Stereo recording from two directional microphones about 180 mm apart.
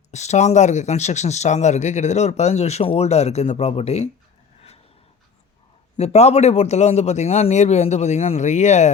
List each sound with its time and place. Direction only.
0.1 s speech: 40° left (ahead or behind)
6.0 s speech: 35° left (ahead or behind)